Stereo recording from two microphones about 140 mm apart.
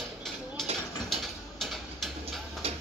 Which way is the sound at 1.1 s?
Centre (ahead or behind).